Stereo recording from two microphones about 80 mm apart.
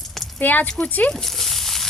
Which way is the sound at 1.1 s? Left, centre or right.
Centre.